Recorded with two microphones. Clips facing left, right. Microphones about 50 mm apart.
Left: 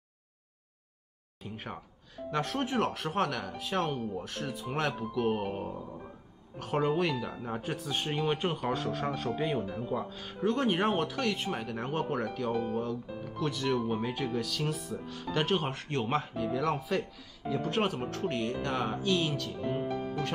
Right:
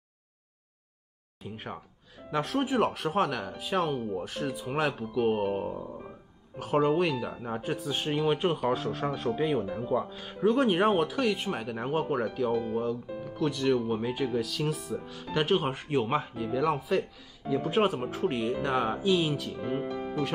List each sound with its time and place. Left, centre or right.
1.4 s speech: centre
6.6 s speech: centre